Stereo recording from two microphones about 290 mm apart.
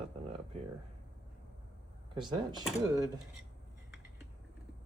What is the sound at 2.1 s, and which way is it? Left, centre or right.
Speech, centre.